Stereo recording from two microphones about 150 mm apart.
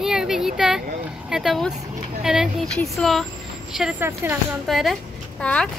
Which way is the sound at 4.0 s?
15° right (ahead or behind).